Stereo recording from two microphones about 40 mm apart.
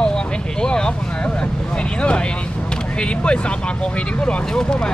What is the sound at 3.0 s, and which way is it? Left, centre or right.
Speech, left.